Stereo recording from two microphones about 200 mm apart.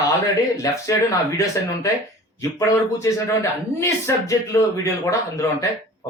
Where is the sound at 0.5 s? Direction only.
15° left (ahead or behind).